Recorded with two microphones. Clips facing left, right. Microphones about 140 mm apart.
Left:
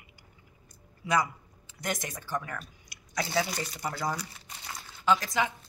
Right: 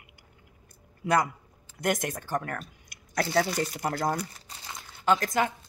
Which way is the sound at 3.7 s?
50° right (ahead or behind).